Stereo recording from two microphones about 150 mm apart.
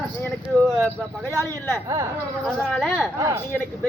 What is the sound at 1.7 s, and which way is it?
Speech, 20° right (ahead or behind).